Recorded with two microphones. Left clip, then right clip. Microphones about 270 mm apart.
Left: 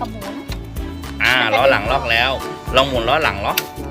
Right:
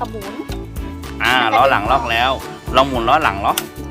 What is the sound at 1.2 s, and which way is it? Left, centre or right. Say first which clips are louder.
Speech: right 1 dB; centre.